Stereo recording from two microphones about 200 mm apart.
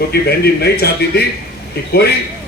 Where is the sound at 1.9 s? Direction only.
50° left (ahead or behind).